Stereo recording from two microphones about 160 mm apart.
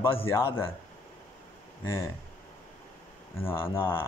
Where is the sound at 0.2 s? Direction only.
15° left (ahead or behind).